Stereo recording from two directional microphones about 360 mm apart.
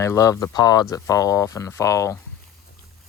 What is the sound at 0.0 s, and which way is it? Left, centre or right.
Speech, centre.